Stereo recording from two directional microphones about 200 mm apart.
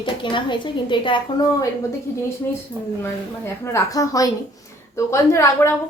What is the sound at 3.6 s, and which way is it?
A woman's voice, 15° left (ahead or behind).